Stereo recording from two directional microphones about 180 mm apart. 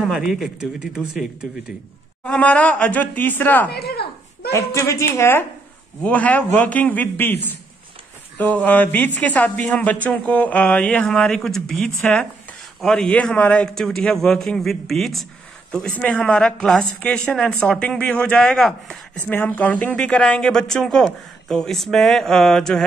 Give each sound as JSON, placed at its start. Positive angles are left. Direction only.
{"t": 0.0, "sound": "speech", "side_deg": 0}
{"t": 2.2, "sound": "speech", "side_deg": 5}
{"t": 3.7, "sound": "a sound", "side_deg": 60}
{"t": 4.5, "sound": "speech", "side_deg": 15}